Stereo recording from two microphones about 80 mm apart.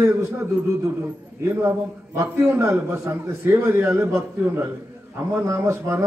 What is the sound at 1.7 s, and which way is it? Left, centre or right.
A man's voice, right.